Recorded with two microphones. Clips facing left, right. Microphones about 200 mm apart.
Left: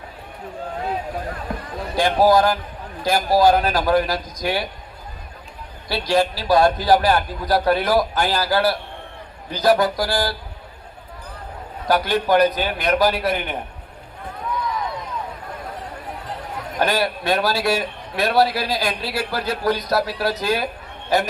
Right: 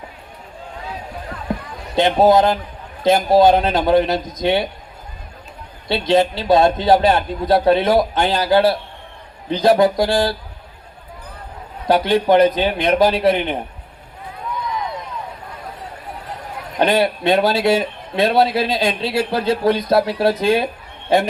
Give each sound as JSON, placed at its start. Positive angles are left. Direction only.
{"t": 1.5, "sound": "basketball bounce", "side_deg": -20}
{"t": 2.0, "sound": "a man's voice", "side_deg": -25}
{"t": 5.9, "sound": "a man's voice", "side_deg": -25}
{"t": 11.9, "sound": "a man's voice", "side_deg": -25}
{"t": 16.7, "sound": "a man's voice", "side_deg": -25}